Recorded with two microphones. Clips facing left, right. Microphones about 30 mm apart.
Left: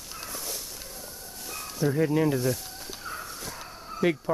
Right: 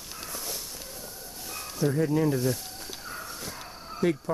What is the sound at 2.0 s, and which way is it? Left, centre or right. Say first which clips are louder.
Speech: left 2 dB; centre.